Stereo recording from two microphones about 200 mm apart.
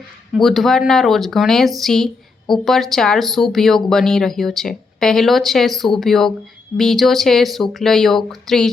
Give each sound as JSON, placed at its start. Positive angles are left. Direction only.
{"t": 0.3, "sound": "speech", "side_deg": 0}